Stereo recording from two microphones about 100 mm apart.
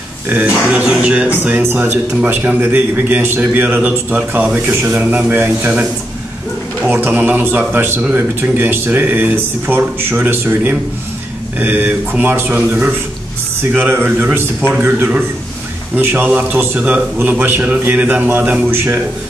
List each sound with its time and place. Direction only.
0.3 s a man's voice: 15° right (ahead or behind)
6.9 s a man's voice: 20° right (ahead or behind)